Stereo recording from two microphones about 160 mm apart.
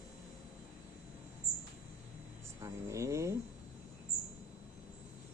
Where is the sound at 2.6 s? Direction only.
20° right (ahead or behind).